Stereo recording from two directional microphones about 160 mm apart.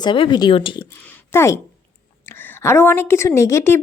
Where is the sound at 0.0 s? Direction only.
30° left (ahead or behind).